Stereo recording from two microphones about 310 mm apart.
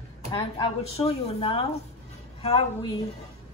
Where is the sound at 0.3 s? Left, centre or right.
Centre.